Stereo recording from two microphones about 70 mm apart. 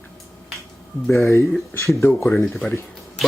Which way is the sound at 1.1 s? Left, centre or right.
Left.